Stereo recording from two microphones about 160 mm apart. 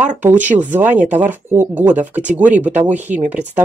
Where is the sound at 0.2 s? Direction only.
10° right (ahead or behind).